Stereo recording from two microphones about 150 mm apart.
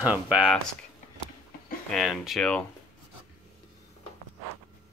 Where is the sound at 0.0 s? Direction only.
10° right (ahead or behind).